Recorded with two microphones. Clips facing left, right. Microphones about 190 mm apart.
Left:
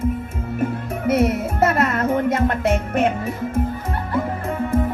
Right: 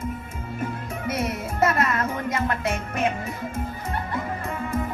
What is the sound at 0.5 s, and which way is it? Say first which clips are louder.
Music: left 7 dB; 55° left (ahead or behind).